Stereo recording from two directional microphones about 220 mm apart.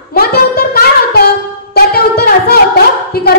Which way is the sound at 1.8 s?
45° left (ahead or behind).